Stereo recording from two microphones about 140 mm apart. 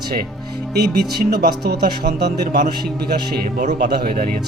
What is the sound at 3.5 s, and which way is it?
Speech, 80° right.